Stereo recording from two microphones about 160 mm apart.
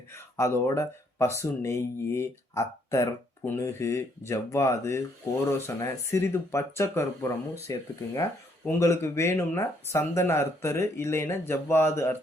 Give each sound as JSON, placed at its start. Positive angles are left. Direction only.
{"t": 0.1, "sound": "speech", "side_deg": 15}